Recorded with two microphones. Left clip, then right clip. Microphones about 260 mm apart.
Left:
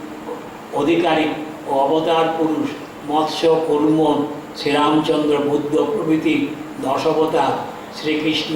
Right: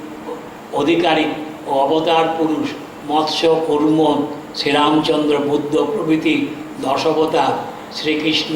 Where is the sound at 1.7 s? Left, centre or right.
Left.